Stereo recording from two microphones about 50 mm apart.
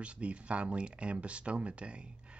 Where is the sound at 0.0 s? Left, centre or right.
Right.